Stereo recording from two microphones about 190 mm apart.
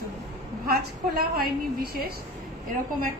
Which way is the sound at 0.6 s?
55° right (ahead or behind).